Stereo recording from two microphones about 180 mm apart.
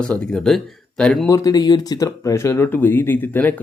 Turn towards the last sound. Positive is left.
turn(degrees=10)  # may be behind; listen again after turning